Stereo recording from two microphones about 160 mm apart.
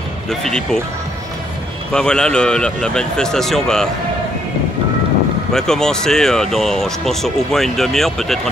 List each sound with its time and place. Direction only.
0.3 s speech: 5° left (ahead or behind)
1.9 s speech: 5° left (ahead or behind)
5.5 s speech: 5° left (ahead or behind)